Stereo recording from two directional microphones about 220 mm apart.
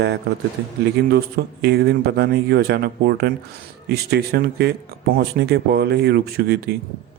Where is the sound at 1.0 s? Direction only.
50° right (ahead or behind).